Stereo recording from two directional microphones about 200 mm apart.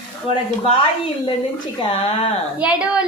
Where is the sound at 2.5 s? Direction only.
5° right (ahead or behind).